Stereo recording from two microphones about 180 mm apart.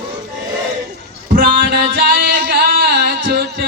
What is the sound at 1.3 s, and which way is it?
Music, 55° right (ahead or behind).